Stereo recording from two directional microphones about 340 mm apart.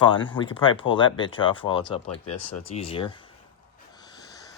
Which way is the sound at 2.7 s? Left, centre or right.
Centre.